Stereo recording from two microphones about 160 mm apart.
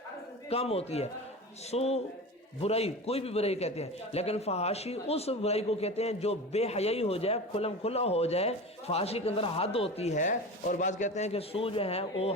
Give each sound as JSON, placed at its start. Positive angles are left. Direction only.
{"t": 0.5, "sound": "a man's voice", "side_deg": 40}